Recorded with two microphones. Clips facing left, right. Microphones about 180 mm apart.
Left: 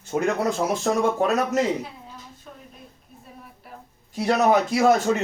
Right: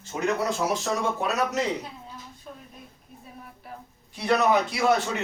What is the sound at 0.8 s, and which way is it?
Speech, 45° left (ahead or behind).